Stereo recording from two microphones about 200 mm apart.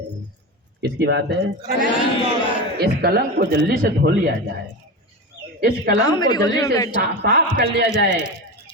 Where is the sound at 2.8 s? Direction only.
50° right (ahead or behind).